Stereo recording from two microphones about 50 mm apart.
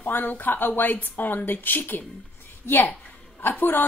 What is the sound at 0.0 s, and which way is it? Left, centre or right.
A woman's voice, left.